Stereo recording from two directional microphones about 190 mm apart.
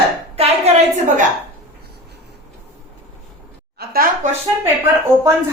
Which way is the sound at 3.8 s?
55° right (ahead or behind).